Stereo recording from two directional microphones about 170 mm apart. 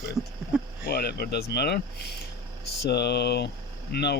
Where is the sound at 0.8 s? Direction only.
65° left (ahead or behind).